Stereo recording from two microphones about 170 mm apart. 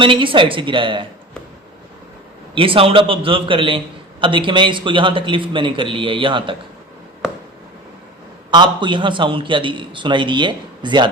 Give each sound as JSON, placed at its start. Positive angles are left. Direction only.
{"t": 0.0, "sound": "a man's voice", "side_deg": -30}
{"t": 2.6, "sound": "a man's voice", "side_deg": -30}
{"t": 8.4, "sound": "a man's voice", "side_deg": -25}